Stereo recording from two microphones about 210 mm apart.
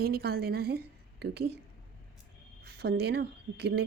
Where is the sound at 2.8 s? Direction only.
50° right (ahead or behind).